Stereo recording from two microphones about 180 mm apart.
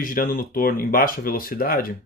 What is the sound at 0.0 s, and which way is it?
Speech, 50° left (ahead or behind).